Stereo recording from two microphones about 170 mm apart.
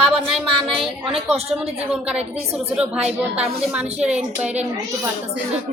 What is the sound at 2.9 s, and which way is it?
Speech, 40° right (ahead or behind).